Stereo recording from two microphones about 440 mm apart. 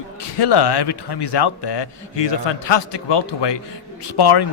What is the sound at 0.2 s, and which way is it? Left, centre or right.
A man's voice, left.